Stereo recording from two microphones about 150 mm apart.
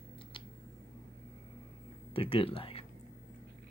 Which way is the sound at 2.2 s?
40° left (ahead or behind).